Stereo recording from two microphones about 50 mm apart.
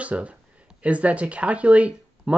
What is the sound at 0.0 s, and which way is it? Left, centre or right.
Speech, right.